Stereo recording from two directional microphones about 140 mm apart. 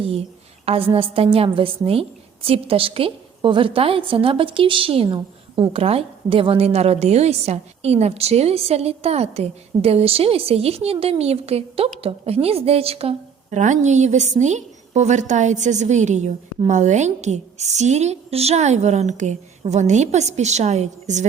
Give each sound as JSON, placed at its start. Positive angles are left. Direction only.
{"t": 0.6, "sound": "a woman's voice", "side_deg": -45}